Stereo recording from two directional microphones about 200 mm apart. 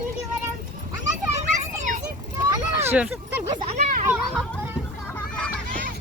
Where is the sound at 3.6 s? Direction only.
35° right (ahead or behind).